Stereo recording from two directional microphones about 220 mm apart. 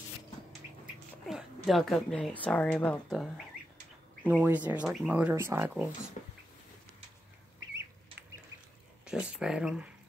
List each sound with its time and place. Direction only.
1.2 s a woman's voice: centre (ahead or behind)
4.2 s speech: 5° right (ahead or behind)
6.2 s a sound: 35° left (ahead or behind)
9.0 s speech: 5° right (ahead or behind)